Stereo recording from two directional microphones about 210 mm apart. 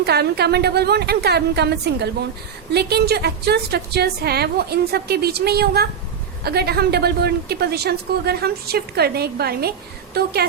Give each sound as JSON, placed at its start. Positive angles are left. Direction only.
{"t": 0.0, "sound": "a woman's voice", "side_deg": -50}